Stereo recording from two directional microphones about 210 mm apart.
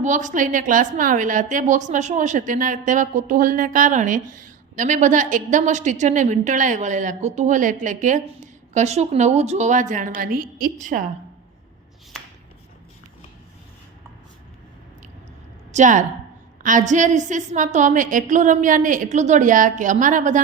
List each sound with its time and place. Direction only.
0.0 s a woman's voice: 35° right (ahead or behind)
15.7 s a woman's voice: 35° right (ahead or behind)